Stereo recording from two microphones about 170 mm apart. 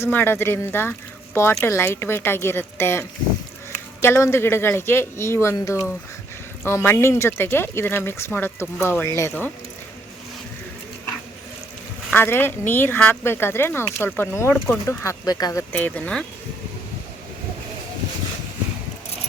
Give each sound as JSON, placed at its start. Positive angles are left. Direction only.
{"t": 0.0, "sound": "speech", "side_deg": 10}
{"t": 12.1, "sound": "speech", "side_deg": 10}
{"t": 15.7, "sound": "speech", "side_deg": 10}